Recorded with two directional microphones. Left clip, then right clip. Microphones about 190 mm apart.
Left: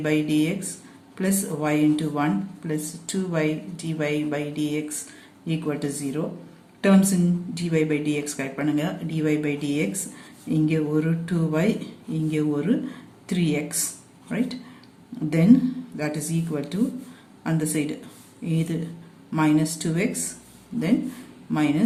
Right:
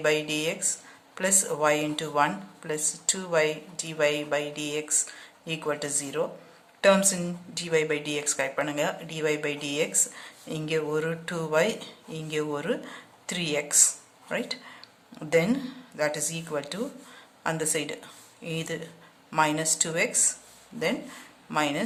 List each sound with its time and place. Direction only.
0.0 s speech: 35° right (ahead or behind)
21.5 s speech: 35° right (ahead or behind)